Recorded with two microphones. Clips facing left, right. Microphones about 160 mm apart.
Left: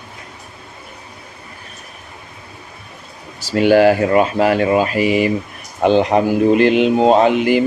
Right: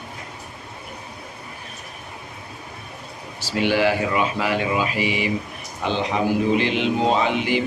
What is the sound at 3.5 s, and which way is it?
Mantra, 45° left (ahead or behind).